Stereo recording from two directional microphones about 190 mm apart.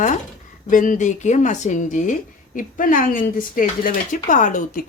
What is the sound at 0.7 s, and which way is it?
Speech, 40° left (ahead or behind).